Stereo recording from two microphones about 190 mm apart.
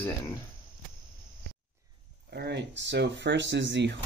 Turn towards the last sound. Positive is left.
turn(degrees=-70)  # may be behind; listen again after turning